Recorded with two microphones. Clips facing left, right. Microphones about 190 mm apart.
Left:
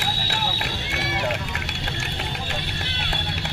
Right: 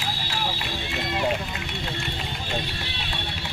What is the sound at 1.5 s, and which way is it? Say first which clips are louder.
Vehicle: even; 70° left (ahead or behind).